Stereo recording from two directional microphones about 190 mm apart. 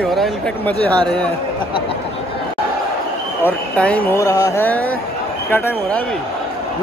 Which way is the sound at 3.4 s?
5° left (ahead or behind).